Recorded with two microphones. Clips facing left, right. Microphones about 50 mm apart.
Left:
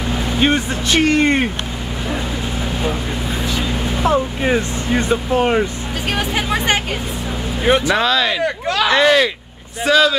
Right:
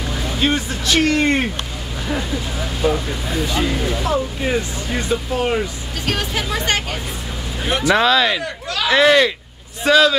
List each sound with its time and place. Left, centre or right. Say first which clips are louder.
0.4 s speech: left 3 dB; left
2.8 s speech: right 5 dB; left
4.0 s speech: left 4 dB; left
7.9 s speech: right 1 dB; centre